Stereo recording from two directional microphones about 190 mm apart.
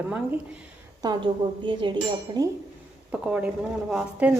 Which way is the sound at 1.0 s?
25° right (ahead or behind).